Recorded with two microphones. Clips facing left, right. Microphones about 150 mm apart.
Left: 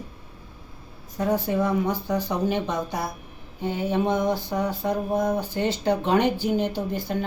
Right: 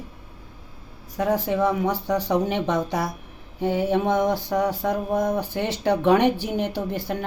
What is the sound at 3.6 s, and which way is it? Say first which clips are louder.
Speech: right 3 dB; 75° right (ahead or behind).